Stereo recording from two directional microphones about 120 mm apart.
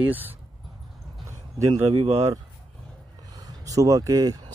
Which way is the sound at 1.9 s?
55° right (ahead or behind).